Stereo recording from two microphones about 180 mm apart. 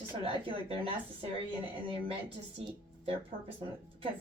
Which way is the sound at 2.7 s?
30° right (ahead or behind).